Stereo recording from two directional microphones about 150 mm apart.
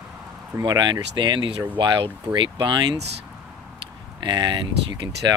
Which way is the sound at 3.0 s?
90° right.